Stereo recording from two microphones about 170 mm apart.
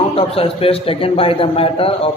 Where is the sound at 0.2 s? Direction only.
35° left (ahead or behind).